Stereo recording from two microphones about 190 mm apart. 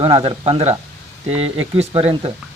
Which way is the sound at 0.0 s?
30° right (ahead or behind).